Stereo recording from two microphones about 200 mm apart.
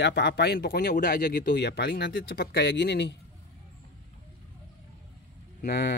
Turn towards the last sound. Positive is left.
turn(degrees=55)  # may be behind; listen again after turning